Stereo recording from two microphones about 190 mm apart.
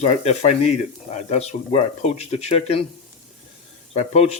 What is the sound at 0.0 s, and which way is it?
Speech, 35° left (ahead or behind).